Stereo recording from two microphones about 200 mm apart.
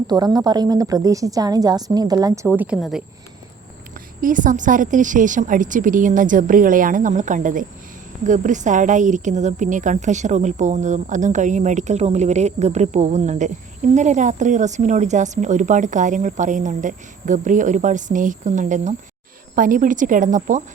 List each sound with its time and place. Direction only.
0.1 s a woman's voice: 20° right (ahead or behind)
2.6 s a woman's voice: 5° right (ahead or behind)
4.2 s speech: 40° right (ahead or behind)